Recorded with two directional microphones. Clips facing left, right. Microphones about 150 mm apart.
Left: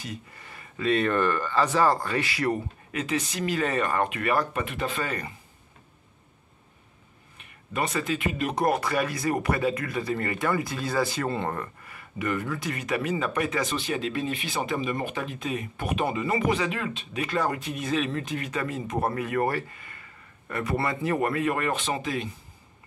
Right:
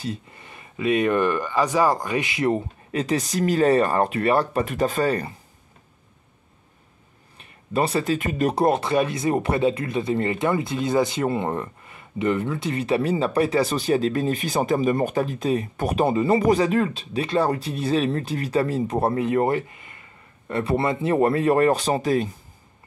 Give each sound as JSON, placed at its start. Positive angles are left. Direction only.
{"t": 0.0, "sound": "speech", "side_deg": -25}
{"t": 7.3, "sound": "speech", "side_deg": -30}
{"t": 8.6, "sound": "speech", "side_deg": -25}